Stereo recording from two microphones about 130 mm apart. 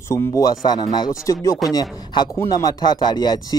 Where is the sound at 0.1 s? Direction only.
30° left (ahead or behind).